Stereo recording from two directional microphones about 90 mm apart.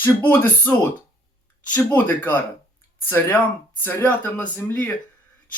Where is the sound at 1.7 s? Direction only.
20° left (ahead or behind).